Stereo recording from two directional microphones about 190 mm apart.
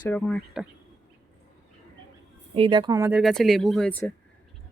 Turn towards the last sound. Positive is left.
turn(degrees=5)  # may be behind; listen again after turning